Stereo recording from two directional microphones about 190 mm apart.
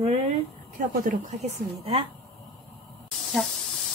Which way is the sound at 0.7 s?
45° right (ahead or behind).